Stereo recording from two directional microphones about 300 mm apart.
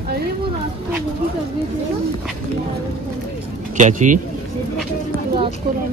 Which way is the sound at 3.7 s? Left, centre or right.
Right.